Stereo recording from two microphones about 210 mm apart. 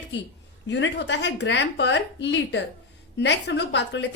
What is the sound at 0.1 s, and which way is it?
A woman's voice, 55° left (ahead or behind).